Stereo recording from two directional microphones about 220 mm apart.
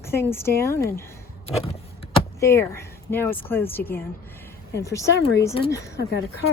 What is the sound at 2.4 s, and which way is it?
Speech, 10° left (ahead or behind).